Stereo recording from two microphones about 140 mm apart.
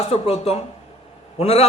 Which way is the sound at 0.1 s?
45° left (ahead or behind).